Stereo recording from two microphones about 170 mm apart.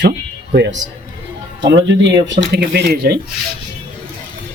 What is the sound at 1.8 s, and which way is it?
Speech, 90° right.